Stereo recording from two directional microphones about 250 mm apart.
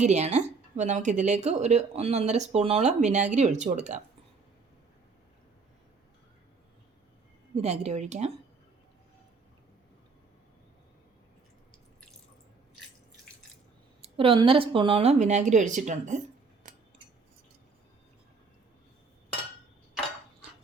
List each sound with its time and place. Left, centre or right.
0.0 s speech: right
7.5 s speech: right
14.2 s speech: right